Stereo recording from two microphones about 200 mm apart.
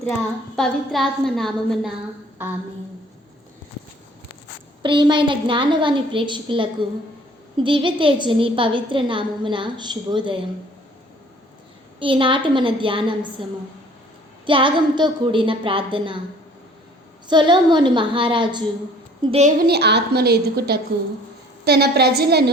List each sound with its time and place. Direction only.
0.5 s a woman's voice: centre (ahead or behind)
4.8 s a woman's voice: 25° right (ahead or behind)
11.9 s a woman's voice: 25° right (ahead or behind)
17.2 s a woman's voice: 20° right (ahead or behind); by 22.4 s 55° right (ahead or behind)